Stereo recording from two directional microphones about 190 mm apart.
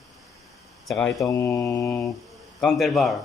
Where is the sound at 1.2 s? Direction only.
15° left (ahead or behind).